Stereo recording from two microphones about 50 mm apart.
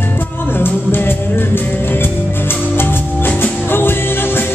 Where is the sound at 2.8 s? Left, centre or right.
Left.